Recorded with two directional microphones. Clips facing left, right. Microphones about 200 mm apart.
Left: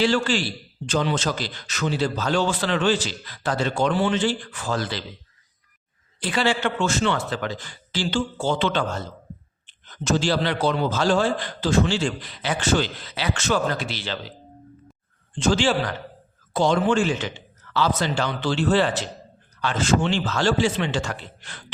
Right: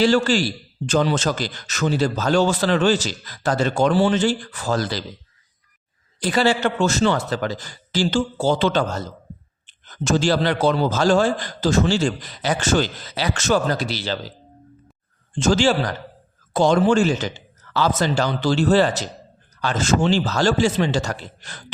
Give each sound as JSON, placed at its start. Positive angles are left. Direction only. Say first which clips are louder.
{"t": 0.0, "sound": "a man's voice", "louder": "right 4 dB", "side_deg": -40}
{"t": 6.1, "sound": "a man's voice", "louder": "right 4 dB", "side_deg": -40}
{"t": 15.4, "sound": "a man's voice", "louder": "right 3 dB", "side_deg": -45}